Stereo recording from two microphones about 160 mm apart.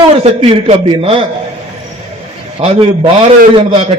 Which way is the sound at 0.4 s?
35° right (ahead or behind).